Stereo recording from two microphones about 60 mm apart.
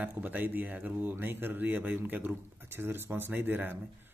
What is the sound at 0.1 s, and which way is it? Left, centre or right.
Speech, right.